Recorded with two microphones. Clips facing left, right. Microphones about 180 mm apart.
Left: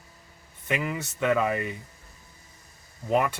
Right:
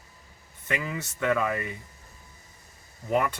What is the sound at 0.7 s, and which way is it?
Speech, 15° left (ahead or behind).